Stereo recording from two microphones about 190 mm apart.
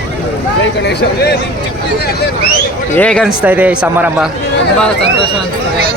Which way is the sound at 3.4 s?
10° right (ahead or behind).